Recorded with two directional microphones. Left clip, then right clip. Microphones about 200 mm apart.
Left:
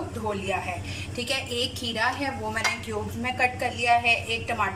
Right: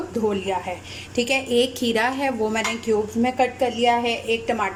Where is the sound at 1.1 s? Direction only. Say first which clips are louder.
Right 9 dB; 35° right (ahead or behind).